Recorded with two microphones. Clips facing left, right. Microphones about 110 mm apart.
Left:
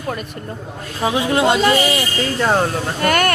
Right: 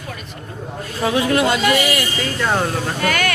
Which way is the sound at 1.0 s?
20° left (ahead or behind).